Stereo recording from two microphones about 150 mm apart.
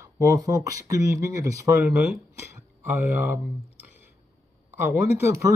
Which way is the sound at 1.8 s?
5° right (ahead or behind).